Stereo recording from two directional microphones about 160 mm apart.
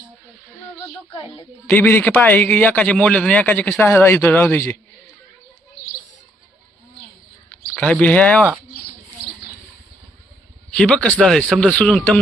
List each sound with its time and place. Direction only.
1.1 s a woman's voice: 35° left (ahead or behind)
1.6 s speech: 10° left (ahead or behind)
7.8 s speech: 10° left (ahead or behind)
10.7 s speech: 10° left (ahead or behind)